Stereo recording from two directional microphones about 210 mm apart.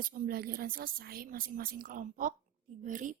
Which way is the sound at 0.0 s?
40° right (ahead or behind).